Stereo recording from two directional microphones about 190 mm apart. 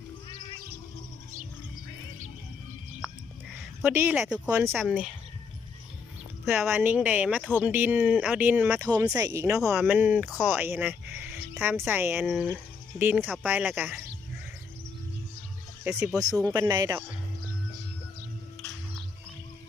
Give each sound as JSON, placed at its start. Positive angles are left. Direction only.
{"t": 3.8, "sound": "speech", "side_deg": -15}
{"t": 4.9, "sound": "speech", "side_deg": 0}
{"t": 6.4, "sound": "speech", "side_deg": 0}
{"t": 9.7, "sound": "speech", "side_deg": -5}
{"t": 12.2, "sound": "speech", "side_deg": 0}
{"t": 13.0, "sound": "speech", "side_deg": -10}
{"t": 15.8, "sound": "speech", "side_deg": -10}